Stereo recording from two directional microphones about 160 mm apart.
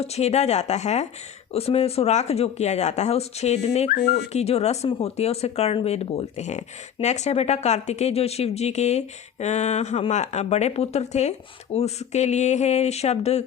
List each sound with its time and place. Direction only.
0.0 s speech: 40° left (ahead or behind)